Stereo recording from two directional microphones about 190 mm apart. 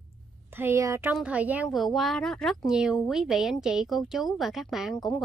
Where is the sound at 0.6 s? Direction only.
15° right (ahead or behind).